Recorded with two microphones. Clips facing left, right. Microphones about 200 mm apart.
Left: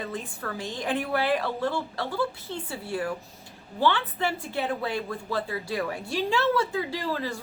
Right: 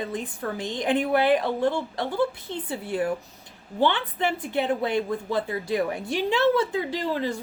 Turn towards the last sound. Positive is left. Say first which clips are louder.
# right 3 dB
turn(degrees=-20)  # may be behind; listen again after turning